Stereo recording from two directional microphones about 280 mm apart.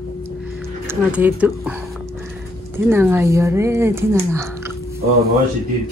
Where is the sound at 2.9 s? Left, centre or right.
Centre.